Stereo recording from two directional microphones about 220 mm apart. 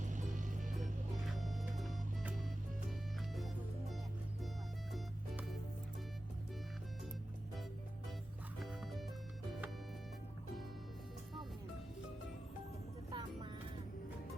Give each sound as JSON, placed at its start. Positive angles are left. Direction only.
{"t": 0.0, "sound": "music", "side_deg": -35}
{"t": 1.4, "sound": "music", "side_deg": 0}
{"t": 5.3, "sound": "music", "side_deg": 0}
{"t": 8.5, "sound": "music", "side_deg": 0}
{"t": 13.1, "sound": "music", "side_deg": -20}